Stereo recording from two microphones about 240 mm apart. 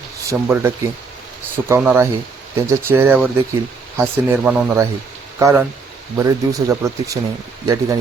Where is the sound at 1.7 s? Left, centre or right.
Centre.